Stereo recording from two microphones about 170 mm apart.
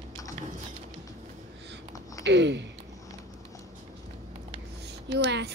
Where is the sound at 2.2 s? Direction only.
90° right.